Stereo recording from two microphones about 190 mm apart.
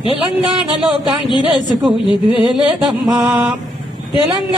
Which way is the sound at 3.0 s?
5° right (ahead or behind).